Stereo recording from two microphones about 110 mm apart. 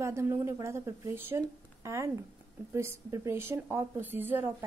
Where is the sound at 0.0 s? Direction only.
25° right (ahead or behind).